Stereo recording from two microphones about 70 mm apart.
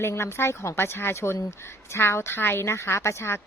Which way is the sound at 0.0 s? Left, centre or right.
Left.